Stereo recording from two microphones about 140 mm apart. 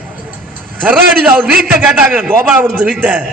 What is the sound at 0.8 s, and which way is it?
Speech, 10° right (ahead or behind).